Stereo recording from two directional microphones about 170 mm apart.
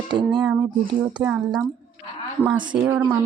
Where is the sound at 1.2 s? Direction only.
10° right (ahead or behind).